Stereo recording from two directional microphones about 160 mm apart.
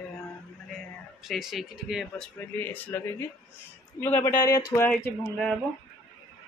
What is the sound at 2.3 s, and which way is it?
Speech, 10° left (ahead or behind).